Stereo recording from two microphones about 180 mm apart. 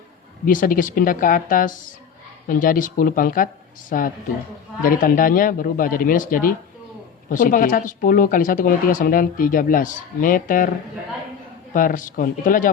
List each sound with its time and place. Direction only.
0.4 s speech: 50° left (ahead or behind)
11.7 s speech: 50° left (ahead or behind)